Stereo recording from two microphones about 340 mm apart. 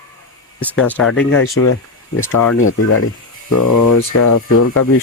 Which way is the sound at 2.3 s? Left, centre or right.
Left.